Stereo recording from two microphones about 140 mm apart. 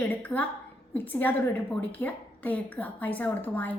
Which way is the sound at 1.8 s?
10° left (ahead or behind).